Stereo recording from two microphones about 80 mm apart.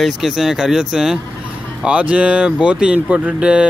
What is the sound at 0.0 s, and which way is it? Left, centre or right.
Speech, centre.